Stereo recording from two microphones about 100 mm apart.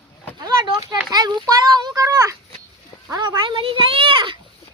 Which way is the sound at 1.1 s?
45° right (ahead or behind).